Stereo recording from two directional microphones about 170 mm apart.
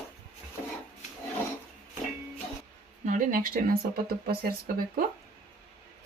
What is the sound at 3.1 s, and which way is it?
Speech, 55° right (ahead or behind).